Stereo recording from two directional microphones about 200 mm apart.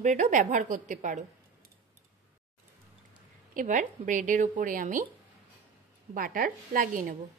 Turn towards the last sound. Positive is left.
turn(degrees=-45)  # may be behind; listen again after turning